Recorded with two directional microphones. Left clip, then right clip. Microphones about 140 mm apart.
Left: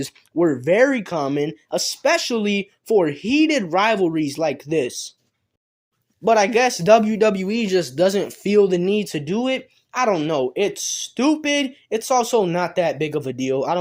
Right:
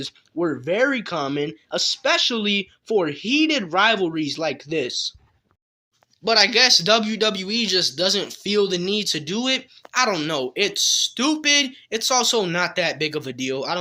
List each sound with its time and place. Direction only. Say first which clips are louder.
0.0 s speech: left 5 dB; 55° left (ahead or behind)
6.2 s speech: left 1 dB; 35° left (ahead or behind)
6.7 s speech: left 2 dB; 55° left (ahead or behind)